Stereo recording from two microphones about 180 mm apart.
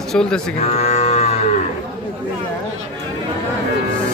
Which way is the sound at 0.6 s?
35° left (ahead or behind).